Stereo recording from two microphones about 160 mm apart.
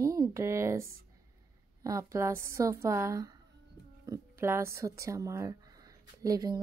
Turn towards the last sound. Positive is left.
turn(degrees=-20)  # may be behind; listen again after turning